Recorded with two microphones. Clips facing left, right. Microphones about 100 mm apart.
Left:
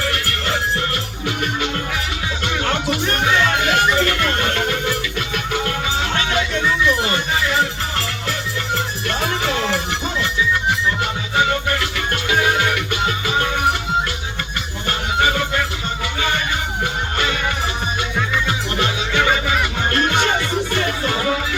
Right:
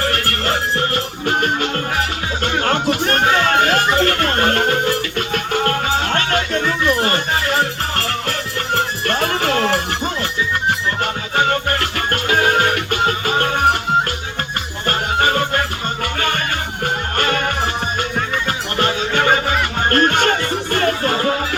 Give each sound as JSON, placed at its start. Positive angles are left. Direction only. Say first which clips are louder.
{"t": 0.0, "sound": "music", "louder": "right 3 dB", "side_deg": -45}
{"t": 14.8, "sound": "music", "louder": "right 2 dB", "side_deg": -45}
{"t": 16.8, "sound": "music", "louder": "right 4 dB", "side_deg": -50}